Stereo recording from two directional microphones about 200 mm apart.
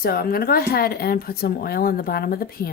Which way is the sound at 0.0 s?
50° left (ahead or behind).